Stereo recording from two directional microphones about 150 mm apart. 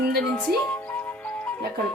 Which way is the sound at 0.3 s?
10° left (ahead or behind).